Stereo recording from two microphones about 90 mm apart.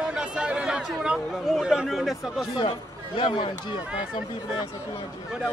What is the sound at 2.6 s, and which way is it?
Speech, 65° left (ahead or behind).